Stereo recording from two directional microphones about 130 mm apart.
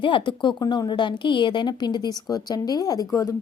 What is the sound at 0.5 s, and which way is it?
Speech, 25° left (ahead or behind).